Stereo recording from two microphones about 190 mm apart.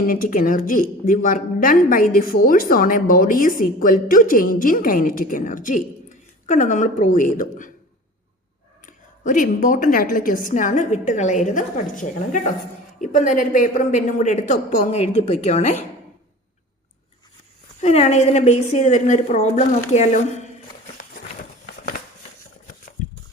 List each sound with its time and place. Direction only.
0.1 s speech: 45° left (ahead or behind)
8.9 s a woman's voice: 45° left (ahead or behind)
17.7 s a woman's voice: 35° left (ahead or behind)